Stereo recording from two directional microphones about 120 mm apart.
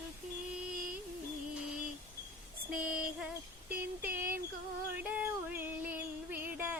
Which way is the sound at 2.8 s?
10° right (ahead or behind).